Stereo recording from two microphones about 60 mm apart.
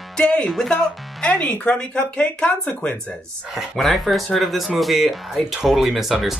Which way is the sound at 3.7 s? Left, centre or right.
Centre.